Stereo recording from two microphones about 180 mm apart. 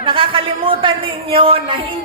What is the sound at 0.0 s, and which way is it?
A man's voice, 30° right (ahead or behind).